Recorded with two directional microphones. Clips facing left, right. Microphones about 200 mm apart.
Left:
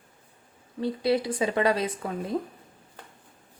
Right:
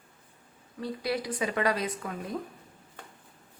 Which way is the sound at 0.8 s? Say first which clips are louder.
Left 7 dB; 25° left (ahead or behind).